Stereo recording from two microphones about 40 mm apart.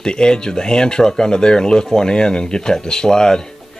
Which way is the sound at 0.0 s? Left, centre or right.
Centre.